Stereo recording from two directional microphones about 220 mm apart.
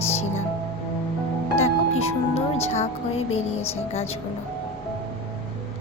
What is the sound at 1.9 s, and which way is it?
Speech, 30° left (ahead or behind).